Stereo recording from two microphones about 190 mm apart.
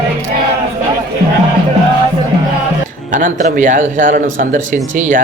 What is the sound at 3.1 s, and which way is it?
A man's voice, 45° right (ahead or behind).